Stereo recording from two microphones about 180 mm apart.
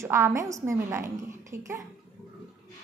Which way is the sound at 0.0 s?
15° right (ahead or behind).